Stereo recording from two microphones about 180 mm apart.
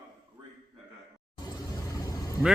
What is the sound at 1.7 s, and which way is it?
Vehicle, 20° left (ahead or behind).